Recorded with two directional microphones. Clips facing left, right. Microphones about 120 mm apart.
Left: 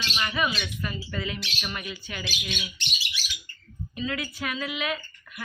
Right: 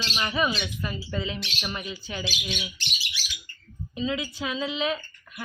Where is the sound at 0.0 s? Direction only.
30° right (ahead or behind).